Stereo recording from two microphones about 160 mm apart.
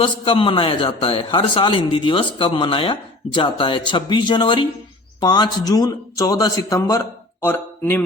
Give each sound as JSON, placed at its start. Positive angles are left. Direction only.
{"t": 0.0, "sound": "a man's voice", "side_deg": 30}